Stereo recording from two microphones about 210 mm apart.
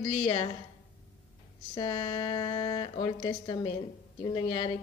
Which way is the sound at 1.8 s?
20° left (ahead or behind).